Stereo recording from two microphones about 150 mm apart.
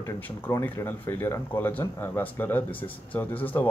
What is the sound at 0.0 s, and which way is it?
Speech, 15° left (ahead or behind).